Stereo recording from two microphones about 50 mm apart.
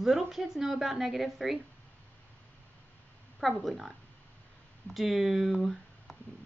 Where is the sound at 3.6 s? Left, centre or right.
Centre.